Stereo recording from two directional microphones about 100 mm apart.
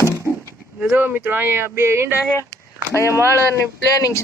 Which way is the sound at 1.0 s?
20° right (ahead or behind).